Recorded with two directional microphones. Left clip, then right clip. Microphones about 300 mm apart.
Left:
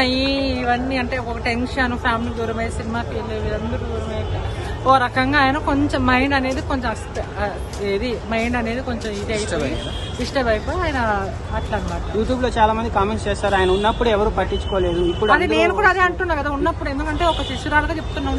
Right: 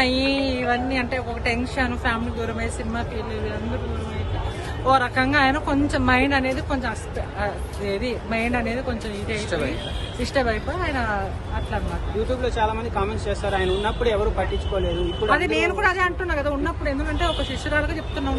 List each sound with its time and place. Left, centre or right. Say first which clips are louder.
0.0 s a woman's voice: left 2 dB; centre
4.8 s a woman's voice: left 3 dB; centre
12.4 s speech: left 6 dB; left
15.3 s a woman's voice: left 4 dB; centre